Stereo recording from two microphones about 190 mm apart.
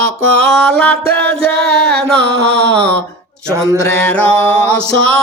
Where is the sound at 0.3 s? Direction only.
5° left (ahead or behind).